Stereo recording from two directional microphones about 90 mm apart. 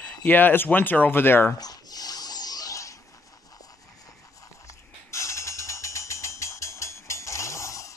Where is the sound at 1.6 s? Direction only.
45° left (ahead or behind).